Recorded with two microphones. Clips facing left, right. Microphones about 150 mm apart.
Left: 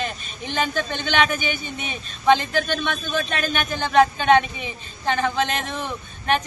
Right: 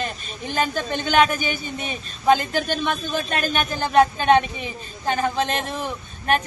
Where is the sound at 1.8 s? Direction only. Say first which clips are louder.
Right 1 dB; centre (ahead or behind).